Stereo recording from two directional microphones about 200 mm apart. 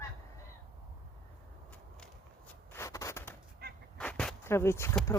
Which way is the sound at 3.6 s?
55° right (ahead or behind).